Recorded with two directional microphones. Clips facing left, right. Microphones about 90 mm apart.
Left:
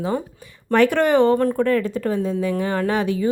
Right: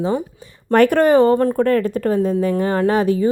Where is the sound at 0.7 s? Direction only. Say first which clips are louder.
Right 4 dB; 45° right (ahead or behind).